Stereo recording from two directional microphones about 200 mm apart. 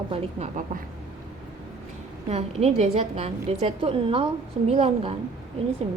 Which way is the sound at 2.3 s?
30° right (ahead or behind).